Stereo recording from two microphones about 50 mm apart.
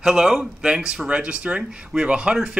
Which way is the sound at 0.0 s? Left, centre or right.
Centre.